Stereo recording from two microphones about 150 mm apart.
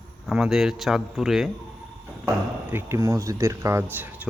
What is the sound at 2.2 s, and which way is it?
A man's voice, 15° right (ahead or behind).